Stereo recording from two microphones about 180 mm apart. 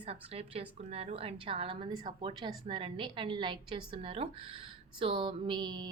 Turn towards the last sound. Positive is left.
turn(degrees=-25)  # may be behind; listen again after turning